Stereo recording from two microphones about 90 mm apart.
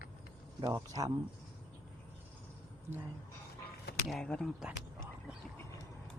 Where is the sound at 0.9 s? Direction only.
50° right (ahead or behind).